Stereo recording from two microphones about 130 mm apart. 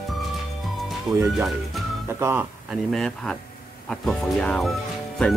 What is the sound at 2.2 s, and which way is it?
Speech, 15° right (ahead or behind).